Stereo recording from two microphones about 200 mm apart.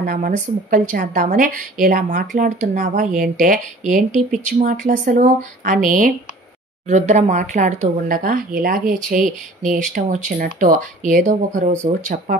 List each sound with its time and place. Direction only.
0.0 s a woman's voice: 45° right (ahead or behind)